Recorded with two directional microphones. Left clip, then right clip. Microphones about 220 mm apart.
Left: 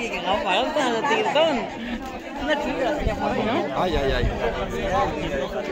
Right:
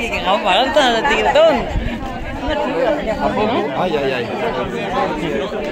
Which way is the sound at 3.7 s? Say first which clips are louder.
Right 5 dB; 15° left (ahead or behind).